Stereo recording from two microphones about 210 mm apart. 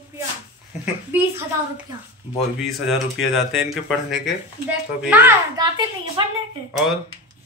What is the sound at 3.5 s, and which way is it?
Speech, centre (ahead or behind).